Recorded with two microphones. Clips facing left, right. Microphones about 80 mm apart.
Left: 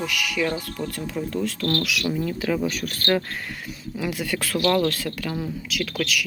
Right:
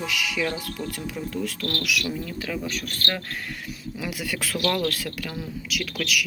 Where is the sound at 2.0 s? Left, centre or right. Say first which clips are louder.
Left 6 dB; centre.